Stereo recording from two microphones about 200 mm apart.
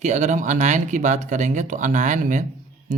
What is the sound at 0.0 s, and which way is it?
Speech, 35° right (ahead or behind).